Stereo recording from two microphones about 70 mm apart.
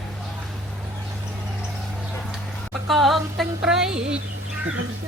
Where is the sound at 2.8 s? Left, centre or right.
Centre.